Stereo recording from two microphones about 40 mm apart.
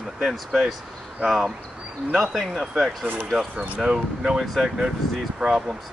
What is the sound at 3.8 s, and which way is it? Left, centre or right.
Speech, centre.